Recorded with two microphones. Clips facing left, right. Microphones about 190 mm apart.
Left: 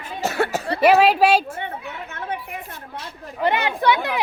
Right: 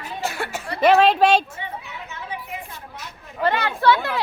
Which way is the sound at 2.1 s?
55° left (ahead or behind).